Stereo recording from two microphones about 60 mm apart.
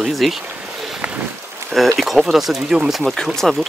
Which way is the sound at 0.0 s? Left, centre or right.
Centre.